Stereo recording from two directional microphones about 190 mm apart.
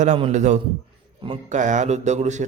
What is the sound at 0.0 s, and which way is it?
Speech, 40° right (ahead or behind).